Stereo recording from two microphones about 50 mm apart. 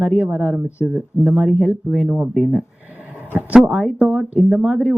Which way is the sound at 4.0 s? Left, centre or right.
Right.